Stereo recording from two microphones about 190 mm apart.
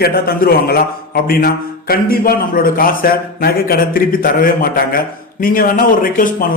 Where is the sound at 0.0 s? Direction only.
55° left (ahead or behind).